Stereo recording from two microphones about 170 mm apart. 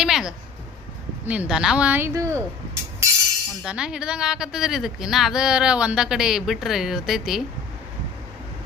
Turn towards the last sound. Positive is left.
turn(degrees=0)  # may be behind; listen again after turning